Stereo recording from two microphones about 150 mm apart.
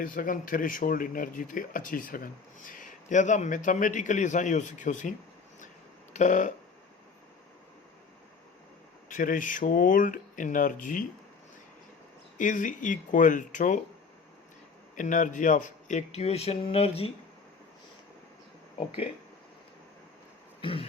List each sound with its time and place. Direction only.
0.0 s speech: 65° left (ahead or behind)
6.1 s speech: 55° left (ahead or behind)
9.0 s speech: 60° left (ahead or behind)
12.4 s speech: 60° left (ahead or behind)
14.9 s speech: 60° left (ahead or behind); by 17.1 s 40° left (ahead or behind)
20.6 s a sound: 35° left (ahead or behind)